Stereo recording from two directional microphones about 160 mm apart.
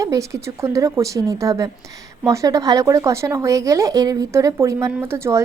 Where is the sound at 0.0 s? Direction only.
20° right (ahead or behind).